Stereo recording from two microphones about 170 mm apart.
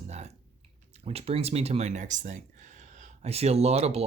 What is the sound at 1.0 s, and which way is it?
Speech, 35° right (ahead or behind).